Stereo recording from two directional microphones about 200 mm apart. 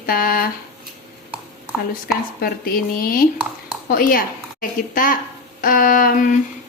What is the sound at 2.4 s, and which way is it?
A woman's voice, 45° left (ahead or behind).